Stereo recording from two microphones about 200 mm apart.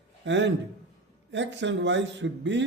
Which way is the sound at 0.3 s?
65° right (ahead or behind).